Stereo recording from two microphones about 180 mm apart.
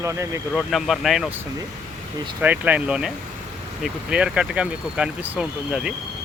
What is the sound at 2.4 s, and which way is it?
Speech, 10° right (ahead or behind).